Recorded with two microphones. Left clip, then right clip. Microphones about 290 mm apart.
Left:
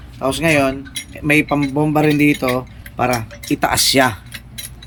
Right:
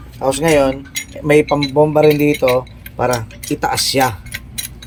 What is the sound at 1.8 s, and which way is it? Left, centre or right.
Speech, centre.